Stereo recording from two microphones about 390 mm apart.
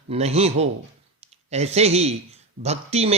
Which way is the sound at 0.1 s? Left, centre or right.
Centre.